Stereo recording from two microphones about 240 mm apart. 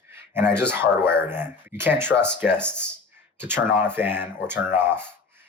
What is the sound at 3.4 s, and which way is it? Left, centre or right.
Speech, centre.